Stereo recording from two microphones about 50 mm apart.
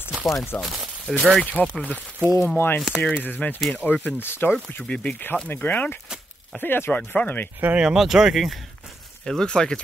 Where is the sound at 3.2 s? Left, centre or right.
Left.